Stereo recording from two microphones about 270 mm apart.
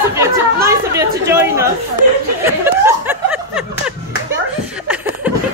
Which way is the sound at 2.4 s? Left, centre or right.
Centre.